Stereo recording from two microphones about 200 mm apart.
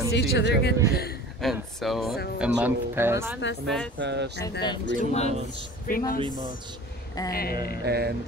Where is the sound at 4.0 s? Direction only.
60° right (ahead or behind).